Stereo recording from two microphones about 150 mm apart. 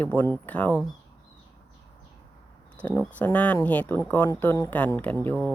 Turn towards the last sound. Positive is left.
turn(degrees=10)  # may be behind; listen again after turning